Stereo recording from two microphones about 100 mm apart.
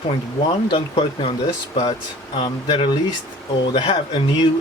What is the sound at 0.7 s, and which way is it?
Speech, 60° left (ahead or behind).